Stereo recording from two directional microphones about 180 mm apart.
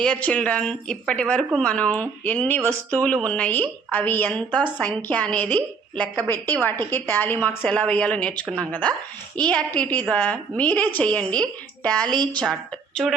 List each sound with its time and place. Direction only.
0.0 s a woman's voice: 5° left (ahead or behind)